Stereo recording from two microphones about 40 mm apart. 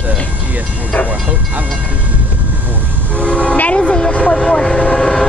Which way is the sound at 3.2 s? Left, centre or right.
Left.